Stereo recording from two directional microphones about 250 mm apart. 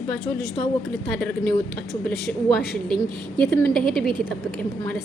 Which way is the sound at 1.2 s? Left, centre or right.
Centre.